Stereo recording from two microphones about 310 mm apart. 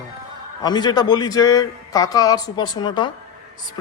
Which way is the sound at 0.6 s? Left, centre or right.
Centre.